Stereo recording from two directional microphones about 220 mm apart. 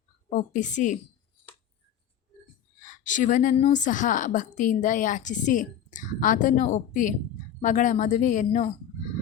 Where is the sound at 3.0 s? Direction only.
35° left (ahead or behind).